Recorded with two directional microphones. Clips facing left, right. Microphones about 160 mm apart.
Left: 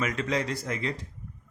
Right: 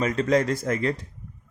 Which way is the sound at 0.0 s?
35° right (ahead or behind).